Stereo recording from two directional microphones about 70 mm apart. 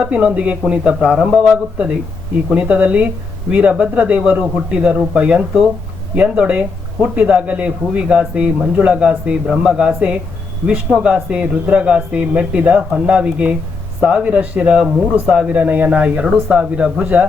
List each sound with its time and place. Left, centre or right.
0.0 s speech: centre
2.5 s speech: centre